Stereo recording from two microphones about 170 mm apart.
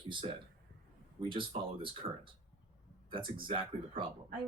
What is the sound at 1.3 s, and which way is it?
Speech, 30° right (ahead or behind).